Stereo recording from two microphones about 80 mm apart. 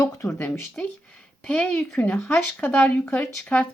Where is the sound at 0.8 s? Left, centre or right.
Centre.